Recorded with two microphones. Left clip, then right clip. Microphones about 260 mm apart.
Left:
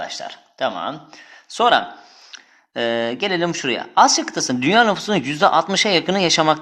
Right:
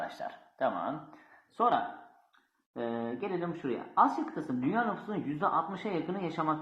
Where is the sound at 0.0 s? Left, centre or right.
Left.